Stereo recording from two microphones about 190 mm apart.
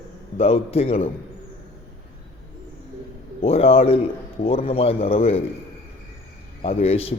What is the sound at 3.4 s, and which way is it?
A man's voice, 30° left (ahead or behind).